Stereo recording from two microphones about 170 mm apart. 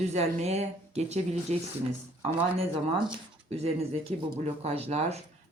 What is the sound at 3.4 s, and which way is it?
Speech, 35° right (ahead or behind).